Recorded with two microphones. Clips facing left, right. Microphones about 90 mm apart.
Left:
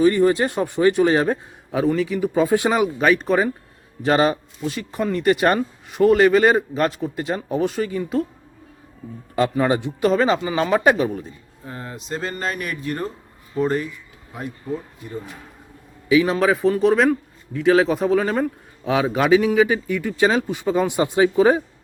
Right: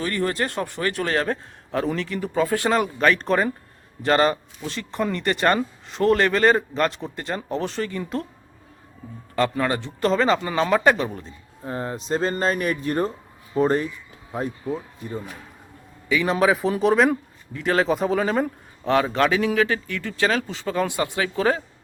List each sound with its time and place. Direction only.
0.0 s speech: 15° left (ahead or behind)
2.3 s speech: 20° left (ahead or behind)
9.3 s speech: 15° left (ahead or behind)
11.6 s speech: 35° right (ahead or behind)
16.0 s speech: 5° left (ahead or behind)